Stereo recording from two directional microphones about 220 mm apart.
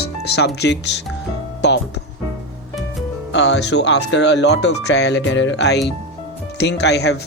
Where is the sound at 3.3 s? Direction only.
55° left (ahead or behind).